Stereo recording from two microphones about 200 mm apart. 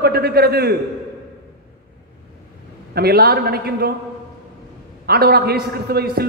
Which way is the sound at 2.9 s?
50° right (ahead or behind).